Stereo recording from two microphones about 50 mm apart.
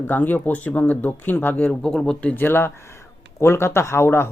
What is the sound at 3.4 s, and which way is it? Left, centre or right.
Speech, left.